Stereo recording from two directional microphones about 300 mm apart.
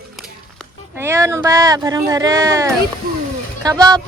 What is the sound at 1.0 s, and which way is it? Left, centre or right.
Speech, centre.